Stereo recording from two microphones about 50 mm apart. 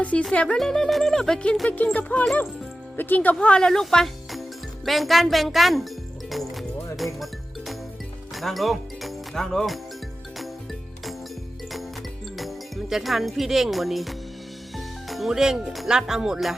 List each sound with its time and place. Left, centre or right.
0.0 s speech: left; by 1.4 s centre
1.7 s speech: left
3.4 s speech: left
3.7 s speech: centre
6.3 s music: centre
8.4 s speech: centre
12.4 s speech: centre
14.8 s music: centre
15.3 s speech: centre